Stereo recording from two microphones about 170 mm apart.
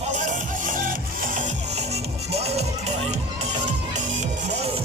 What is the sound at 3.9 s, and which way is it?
Music, 45° right (ahead or behind).